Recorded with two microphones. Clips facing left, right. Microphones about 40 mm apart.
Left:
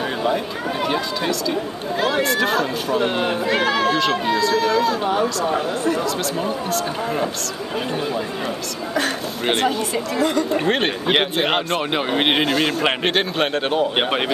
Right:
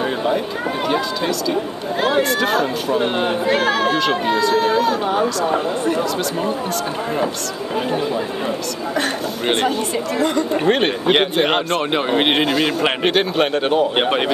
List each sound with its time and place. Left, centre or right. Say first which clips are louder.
2.2 s speech: right 1 dB; centre
3.4 s speech: right 1 dB; right
9.5 s a man's voice: right 1 dB; centre